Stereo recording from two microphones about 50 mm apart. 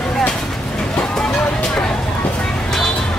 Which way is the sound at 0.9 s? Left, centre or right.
Centre.